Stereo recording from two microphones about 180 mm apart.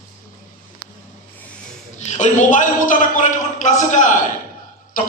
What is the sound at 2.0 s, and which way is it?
A man's voice, 40° left (ahead or behind).